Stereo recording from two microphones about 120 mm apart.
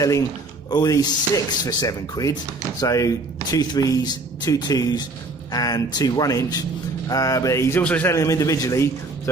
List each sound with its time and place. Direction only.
0.7 s a man's voice: 35° left (ahead or behind)
7.8 s a man's voice: 15° left (ahead or behind)
8.1 s a man's voice: 25° left (ahead or behind)